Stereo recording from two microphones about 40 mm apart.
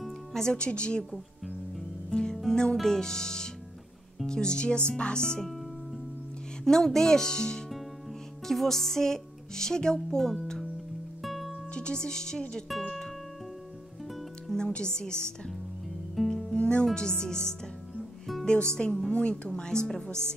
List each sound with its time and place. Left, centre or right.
0.3 s speech: centre
2.0 s music: left
2.5 s speech: centre
6.6 s speech: centre
11.2 s music: centre
11.7 s speech: left
12.6 s speech: centre
14.7 s speech: left
16.2 s music: centre
16.5 s speech: left